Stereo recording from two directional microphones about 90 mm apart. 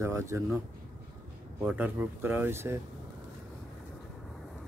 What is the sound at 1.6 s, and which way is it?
Speech, 20° right (ahead or behind).